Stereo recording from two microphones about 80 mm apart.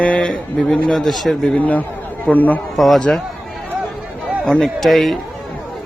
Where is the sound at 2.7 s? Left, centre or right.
Centre.